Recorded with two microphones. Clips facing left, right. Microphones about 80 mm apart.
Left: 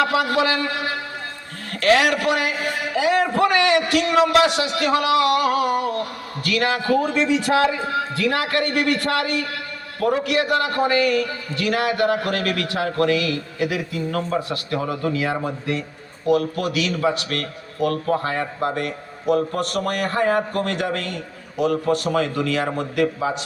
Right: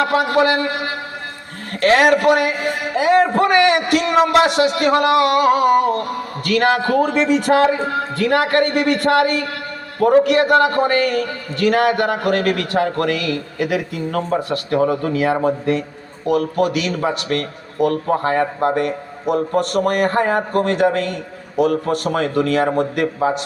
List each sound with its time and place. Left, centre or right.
0.0 s a man's voice: right